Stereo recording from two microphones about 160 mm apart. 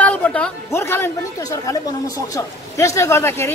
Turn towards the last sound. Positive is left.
turn(degrees=15)  # may be behind; listen again after turning